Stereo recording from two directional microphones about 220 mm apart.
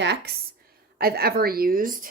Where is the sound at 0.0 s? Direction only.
50° right (ahead or behind).